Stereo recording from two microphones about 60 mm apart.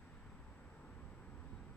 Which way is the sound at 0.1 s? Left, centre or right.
Left.